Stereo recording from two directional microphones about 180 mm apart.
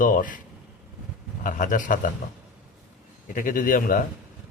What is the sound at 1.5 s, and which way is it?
Speech, 45° left (ahead or behind).